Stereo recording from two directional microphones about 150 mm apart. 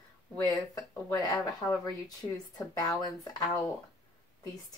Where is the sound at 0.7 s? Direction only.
25° left (ahead or behind).